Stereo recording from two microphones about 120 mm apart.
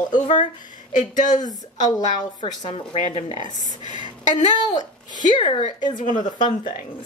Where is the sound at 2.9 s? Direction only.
65° left (ahead or behind).